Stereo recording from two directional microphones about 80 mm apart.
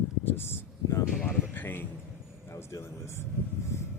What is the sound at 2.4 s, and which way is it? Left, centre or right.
Speech, left.